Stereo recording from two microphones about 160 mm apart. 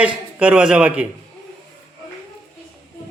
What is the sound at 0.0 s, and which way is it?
A man's voice, 10° right (ahead or behind).